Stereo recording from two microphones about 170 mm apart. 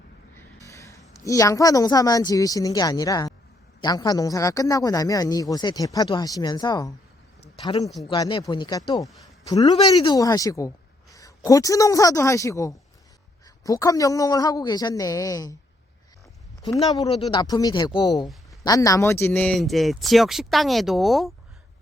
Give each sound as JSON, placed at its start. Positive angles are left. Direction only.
{"t": 0.3, "sound": "a sound", "side_deg": 20}
{"t": 1.2, "sound": "a man's voice", "side_deg": 20}
{"t": 16.6, "sound": "a man's voice", "side_deg": 20}